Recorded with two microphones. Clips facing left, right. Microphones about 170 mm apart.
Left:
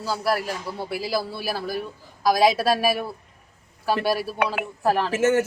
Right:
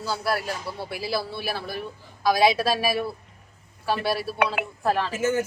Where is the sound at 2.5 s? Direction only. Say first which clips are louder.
Left 2 dB; 5° left (ahead or behind).